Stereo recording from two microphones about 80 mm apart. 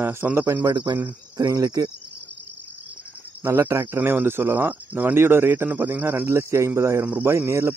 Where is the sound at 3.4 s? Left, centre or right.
Right.